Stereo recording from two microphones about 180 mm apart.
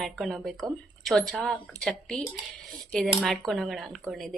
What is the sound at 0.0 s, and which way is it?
Speech, centre (ahead or behind).